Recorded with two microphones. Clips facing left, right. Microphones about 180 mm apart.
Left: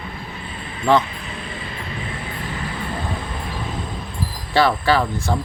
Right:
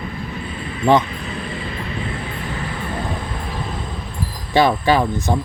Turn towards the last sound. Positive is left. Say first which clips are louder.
# right 2 dB
turn(degrees=-20)  # may be behind; listen again after turning